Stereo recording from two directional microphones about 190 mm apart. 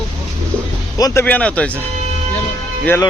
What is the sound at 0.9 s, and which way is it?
Speech, 20° left (ahead or behind).